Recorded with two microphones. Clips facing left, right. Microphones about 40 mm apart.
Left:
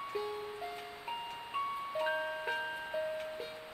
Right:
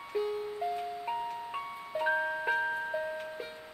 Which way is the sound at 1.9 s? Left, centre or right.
Centre.